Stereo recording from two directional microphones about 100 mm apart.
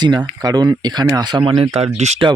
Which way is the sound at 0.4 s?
40° right (ahead or behind).